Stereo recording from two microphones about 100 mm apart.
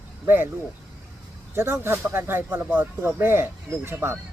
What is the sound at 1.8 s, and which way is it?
Speech, 25° right (ahead or behind).